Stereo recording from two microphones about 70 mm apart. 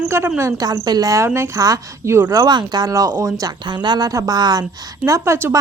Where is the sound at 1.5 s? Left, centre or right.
Right.